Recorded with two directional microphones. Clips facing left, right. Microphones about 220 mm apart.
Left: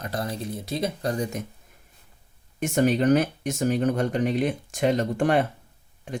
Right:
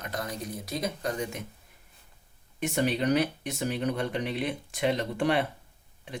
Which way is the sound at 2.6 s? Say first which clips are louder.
Left 6 dB; 45° left (ahead or behind).